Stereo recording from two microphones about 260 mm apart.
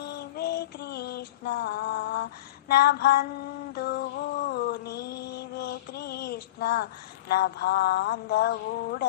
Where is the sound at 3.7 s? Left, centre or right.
Left.